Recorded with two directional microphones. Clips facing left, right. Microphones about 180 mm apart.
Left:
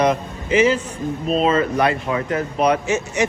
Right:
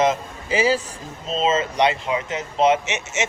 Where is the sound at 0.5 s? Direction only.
35° right (ahead or behind).